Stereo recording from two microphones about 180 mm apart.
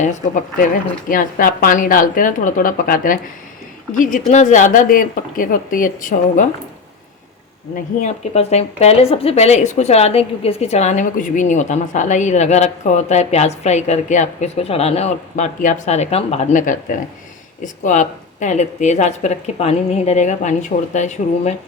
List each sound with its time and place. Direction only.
0.0 s speech: 50° left (ahead or behind)
8.0 s speech: 35° left (ahead or behind)